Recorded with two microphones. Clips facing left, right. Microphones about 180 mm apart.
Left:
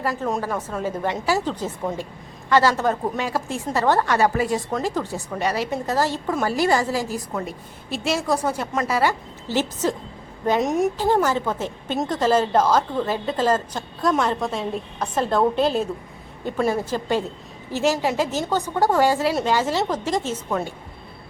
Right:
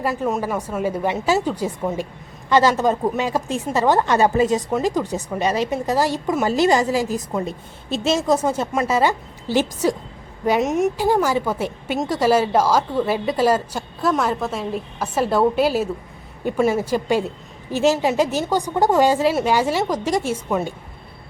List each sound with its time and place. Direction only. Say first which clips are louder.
0.0 s a woman's voice: right 3 dB; 15° right (ahead or behind); by 10.9 s centre (ahead or behind)
10.9 s speech: right 1 dB; 10° right (ahead or behind)